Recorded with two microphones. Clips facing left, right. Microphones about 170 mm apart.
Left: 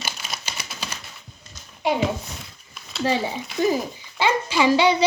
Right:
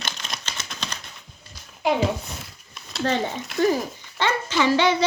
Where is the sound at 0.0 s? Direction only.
5° left (ahead or behind).